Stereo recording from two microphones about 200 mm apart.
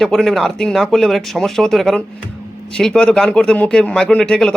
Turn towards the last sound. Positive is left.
turn(degrees=5)  # may be behind; listen again after turning